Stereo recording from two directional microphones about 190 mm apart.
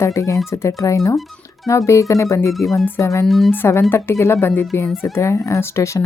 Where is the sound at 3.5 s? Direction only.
10° left (ahead or behind).